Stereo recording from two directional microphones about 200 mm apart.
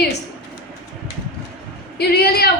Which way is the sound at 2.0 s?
55° left (ahead or behind).